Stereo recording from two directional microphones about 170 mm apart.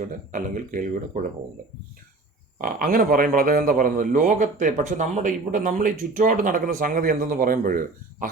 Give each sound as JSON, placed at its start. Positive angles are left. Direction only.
{"t": 0.0, "sound": "a man's voice", "side_deg": -50}
{"t": 2.6, "sound": "a man's voice", "side_deg": -55}